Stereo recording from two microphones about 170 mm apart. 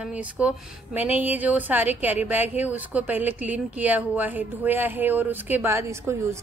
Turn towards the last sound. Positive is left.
turn(degrees=-15)  # may be behind; listen again after turning